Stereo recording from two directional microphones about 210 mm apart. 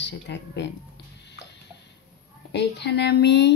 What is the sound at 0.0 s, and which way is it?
Speech, 55° left (ahead or behind).